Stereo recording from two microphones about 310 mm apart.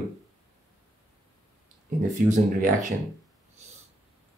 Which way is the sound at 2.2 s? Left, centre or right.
Right.